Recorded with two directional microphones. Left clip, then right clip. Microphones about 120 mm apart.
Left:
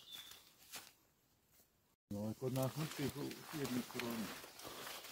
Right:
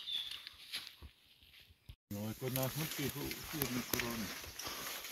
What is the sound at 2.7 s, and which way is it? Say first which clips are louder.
Speech: right 3 dB; 15° right (ahead or behind).